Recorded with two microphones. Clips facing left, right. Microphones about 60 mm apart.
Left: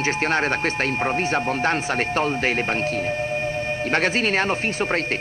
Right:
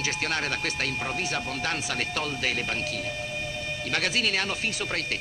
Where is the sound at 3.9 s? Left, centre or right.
Left.